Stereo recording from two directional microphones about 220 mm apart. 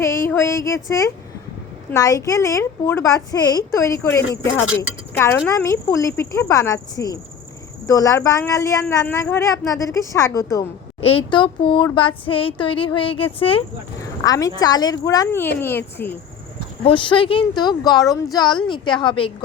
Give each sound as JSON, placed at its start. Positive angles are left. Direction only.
{"t": 0.0, "sound": "a sound", "side_deg": 10}
{"t": 1.9, "sound": "speech", "side_deg": 15}
{"t": 16.8, "sound": "speech", "side_deg": 20}